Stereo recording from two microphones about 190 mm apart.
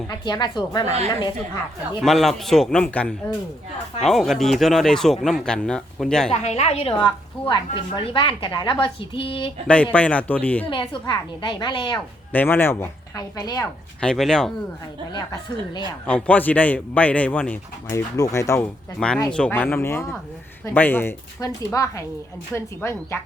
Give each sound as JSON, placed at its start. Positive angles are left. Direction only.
{"t": 0.1, "sound": "a woman's voice", "side_deg": 20}
{"t": 0.9, "sound": "a woman's voice", "side_deg": -35}
{"t": 2.0, "sound": "speech", "side_deg": 0}
{"t": 6.3, "sound": "a woman's voice", "side_deg": 30}
{"t": 9.6, "sound": "speech", "side_deg": 5}
{"t": 10.7, "sound": "a woman's voice", "side_deg": 25}
{"t": 12.3, "sound": "speech", "side_deg": 10}
{"t": 14.0, "sound": "speech", "side_deg": 5}
{"t": 15.1, "sound": "a woman's voice", "side_deg": 25}
{"t": 16.0, "sound": "speech", "side_deg": 5}
{"t": 18.9, "sound": "speech", "side_deg": 5}